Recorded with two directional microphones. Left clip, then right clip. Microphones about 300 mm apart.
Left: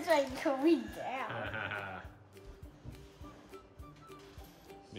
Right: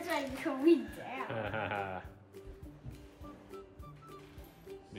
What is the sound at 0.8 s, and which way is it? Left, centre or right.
Speech, centre.